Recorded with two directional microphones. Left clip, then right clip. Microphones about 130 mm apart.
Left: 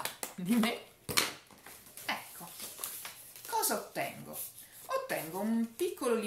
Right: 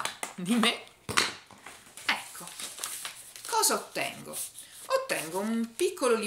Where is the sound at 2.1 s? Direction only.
45° left (ahead or behind).